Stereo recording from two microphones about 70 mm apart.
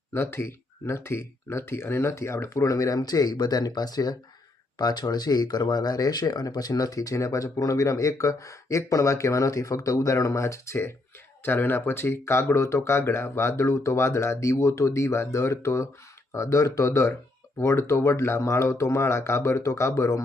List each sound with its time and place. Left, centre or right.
0.1 s speech: left
11.4 s speech: left